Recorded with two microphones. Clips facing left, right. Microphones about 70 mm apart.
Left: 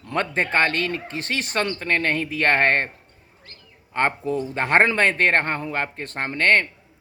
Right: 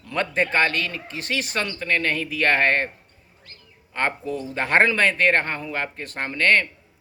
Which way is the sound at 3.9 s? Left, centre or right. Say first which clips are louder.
Left 3 dB; left.